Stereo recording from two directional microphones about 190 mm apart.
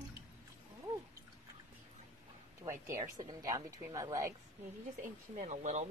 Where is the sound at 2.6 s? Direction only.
15° right (ahead or behind).